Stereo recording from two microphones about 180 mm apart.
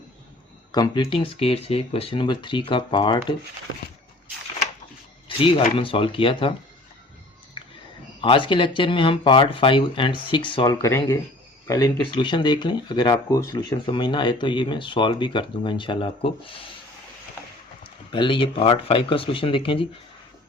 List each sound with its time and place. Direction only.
0.7 s speech: 25° left (ahead or behind)
5.4 s speech: 30° left (ahead or behind)
8.2 s speech: 25° left (ahead or behind)
18.1 s speech: 25° left (ahead or behind)